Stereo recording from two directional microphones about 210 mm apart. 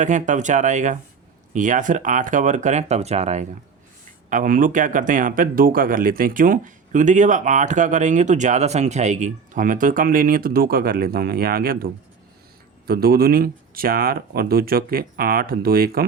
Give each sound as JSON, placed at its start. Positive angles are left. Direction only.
{"t": 0.0, "sound": "speech", "side_deg": -35}
{"t": 12.9, "sound": "speech", "side_deg": -45}